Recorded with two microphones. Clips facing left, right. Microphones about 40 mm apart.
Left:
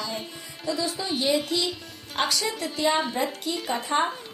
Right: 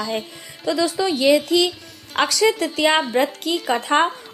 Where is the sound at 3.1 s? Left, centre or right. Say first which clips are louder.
Right 8 dB; right.